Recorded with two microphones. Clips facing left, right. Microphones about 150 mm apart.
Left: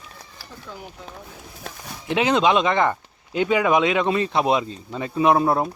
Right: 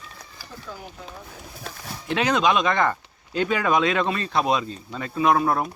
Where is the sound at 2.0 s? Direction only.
20° left (ahead or behind).